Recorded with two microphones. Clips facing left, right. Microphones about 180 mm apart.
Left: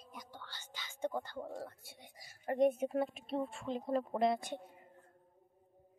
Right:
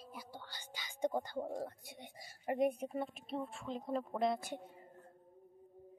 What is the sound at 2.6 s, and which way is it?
A child's voice, centre (ahead or behind).